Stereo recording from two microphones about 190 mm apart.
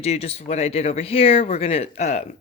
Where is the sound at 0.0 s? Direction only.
35° left (ahead or behind).